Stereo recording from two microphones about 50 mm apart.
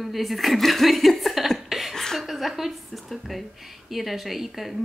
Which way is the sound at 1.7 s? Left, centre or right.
Centre.